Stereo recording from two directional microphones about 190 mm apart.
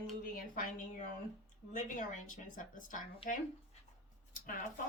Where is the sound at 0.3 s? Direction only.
45° left (ahead or behind).